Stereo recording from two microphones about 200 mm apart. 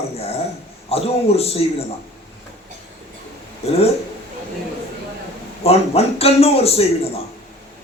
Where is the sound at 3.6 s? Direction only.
30° left (ahead or behind).